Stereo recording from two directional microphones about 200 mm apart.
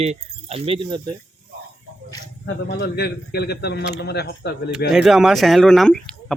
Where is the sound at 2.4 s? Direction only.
55° left (ahead or behind).